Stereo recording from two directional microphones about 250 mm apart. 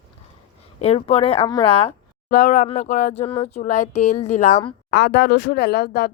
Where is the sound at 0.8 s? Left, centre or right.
Left.